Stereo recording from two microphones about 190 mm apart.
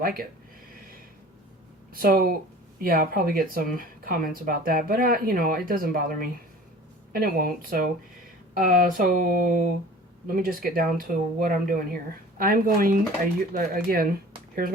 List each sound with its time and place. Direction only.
0.0 s speech: 50° right (ahead or behind)
1.9 s speech: 50° right (ahead or behind)